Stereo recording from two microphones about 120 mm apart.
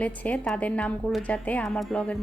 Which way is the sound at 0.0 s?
10° left (ahead or behind).